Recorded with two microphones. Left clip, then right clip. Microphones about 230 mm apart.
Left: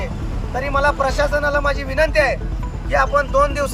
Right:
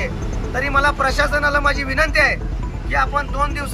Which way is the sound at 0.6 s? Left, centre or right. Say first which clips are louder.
Right 1 dB; centre.